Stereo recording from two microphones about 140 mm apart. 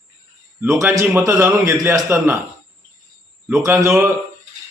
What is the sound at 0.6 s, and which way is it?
A man's voice, 20° right (ahead or behind).